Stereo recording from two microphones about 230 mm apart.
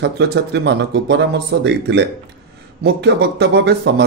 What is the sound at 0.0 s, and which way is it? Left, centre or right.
A man's voice, right.